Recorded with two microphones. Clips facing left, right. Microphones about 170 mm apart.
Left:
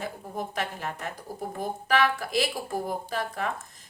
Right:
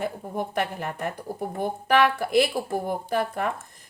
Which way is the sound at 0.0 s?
60° right (ahead or behind).